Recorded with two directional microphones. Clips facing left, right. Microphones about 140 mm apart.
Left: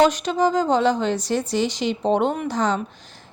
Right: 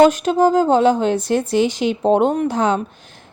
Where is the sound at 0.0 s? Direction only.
50° right (ahead or behind).